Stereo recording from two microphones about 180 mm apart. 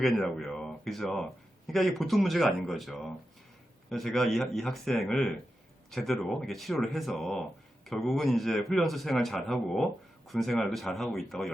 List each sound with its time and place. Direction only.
0.0 s a man's voice: centre (ahead or behind)